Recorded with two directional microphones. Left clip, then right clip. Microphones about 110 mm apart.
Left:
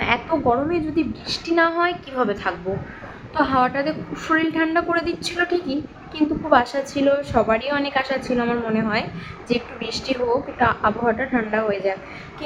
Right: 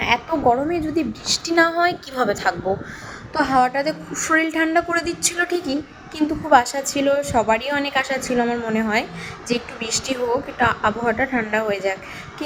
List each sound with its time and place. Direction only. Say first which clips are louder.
0.0 s a woman's voice: right 2 dB; 20° right (ahead or behind)
1.3 s a woman's voice: right 2 dB; 50° right (ahead or behind)
3.3 s a woman's voice: right 1 dB; 25° right (ahead or behind)
10.2 s a woman's voice: left 1 dB; 5° left (ahead or behind)
10.6 s a woman's voice: right 1 dB; 20° right (ahead or behind)